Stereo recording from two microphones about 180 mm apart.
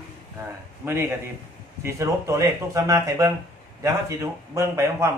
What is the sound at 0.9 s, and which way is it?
A man's voice, 15° right (ahead or behind).